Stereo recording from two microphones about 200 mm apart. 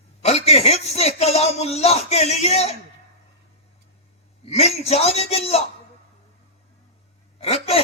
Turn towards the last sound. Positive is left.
turn(degrees=30)  # may be behind; listen again after turning